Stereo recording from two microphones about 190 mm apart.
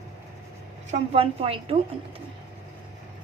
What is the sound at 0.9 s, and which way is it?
Speech, 35° right (ahead or behind).